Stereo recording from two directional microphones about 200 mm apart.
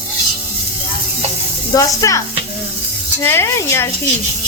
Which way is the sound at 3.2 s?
10° left (ahead or behind).